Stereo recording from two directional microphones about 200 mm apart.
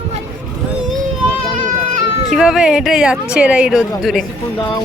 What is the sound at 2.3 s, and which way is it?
Speech, 5° right (ahead or behind).